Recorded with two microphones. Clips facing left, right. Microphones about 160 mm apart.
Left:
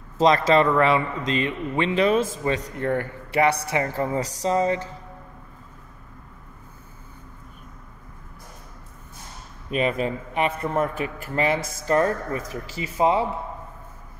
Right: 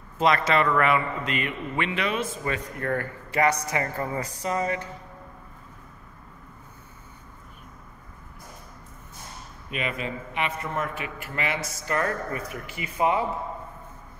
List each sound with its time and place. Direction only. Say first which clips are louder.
0.2 s a man's voice: left 4 dB; 30° left (ahead or behind)
9.7 s a man's voice: left 7 dB; 40° left (ahead or behind)